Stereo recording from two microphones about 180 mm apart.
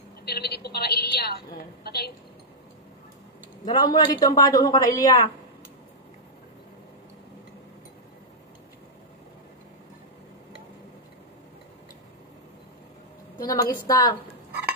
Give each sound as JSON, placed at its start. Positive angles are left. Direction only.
{"t": 0.2, "sound": "a woman's voice", "side_deg": 65}
{"t": 3.6, "sound": "a man's voice", "side_deg": 20}
{"t": 13.4, "sound": "a sound", "side_deg": 20}
{"t": 13.7, "sound": "a man's voice", "side_deg": 20}